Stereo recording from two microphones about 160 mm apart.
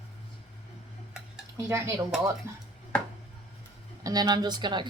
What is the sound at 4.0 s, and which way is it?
Speech, 25° right (ahead or behind).